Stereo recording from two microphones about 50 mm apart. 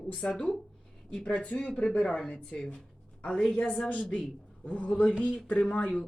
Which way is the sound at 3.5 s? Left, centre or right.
Left.